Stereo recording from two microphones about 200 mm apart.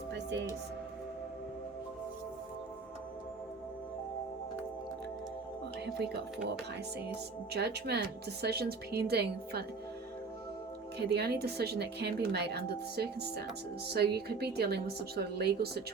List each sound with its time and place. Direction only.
0.1 s music: 60° right (ahead or behind)
5.8 s speech: 55° right (ahead or behind)
7.5 s speech: 55° right (ahead or behind)
10.9 s speech: 55° right (ahead or behind)